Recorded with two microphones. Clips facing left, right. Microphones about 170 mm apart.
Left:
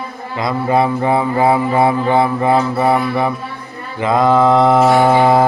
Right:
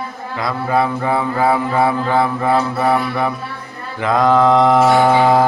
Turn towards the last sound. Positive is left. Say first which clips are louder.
# left 1 dB
turn(degrees=10)  # may be behind; listen again after turning